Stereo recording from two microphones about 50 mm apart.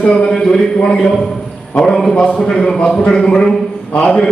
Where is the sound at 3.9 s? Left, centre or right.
Left.